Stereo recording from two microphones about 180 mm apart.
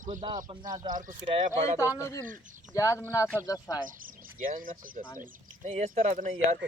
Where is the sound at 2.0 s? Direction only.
15° left (ahead or behind).